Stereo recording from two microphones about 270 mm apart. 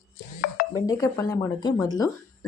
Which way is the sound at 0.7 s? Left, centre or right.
Centre.